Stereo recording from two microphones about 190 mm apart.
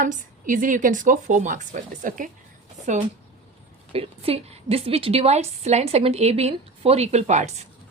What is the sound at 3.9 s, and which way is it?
A woman's voice, 30° right (ahead or behind).